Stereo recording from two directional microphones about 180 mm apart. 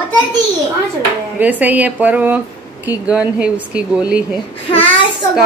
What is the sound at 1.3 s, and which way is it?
A woman's voice, 10° right (ahead or behind).